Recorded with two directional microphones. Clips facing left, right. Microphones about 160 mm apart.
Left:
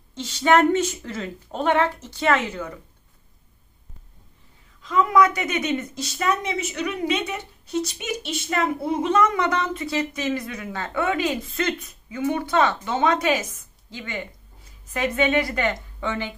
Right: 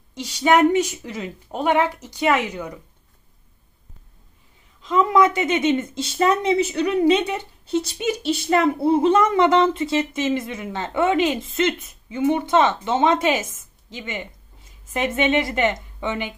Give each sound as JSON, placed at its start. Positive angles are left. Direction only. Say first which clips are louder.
{"t": 0.1, "sound": "a woman's voice", "louder": "right 1 dB", "side_deg": -15}
{"t": 4.8, "sound": "speech", "louder": "right 2 dB", "side_deg": -25}